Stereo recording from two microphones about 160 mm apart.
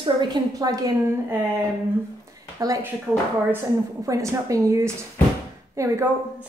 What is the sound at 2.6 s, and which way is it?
Speech, 20° right (ahead or behind).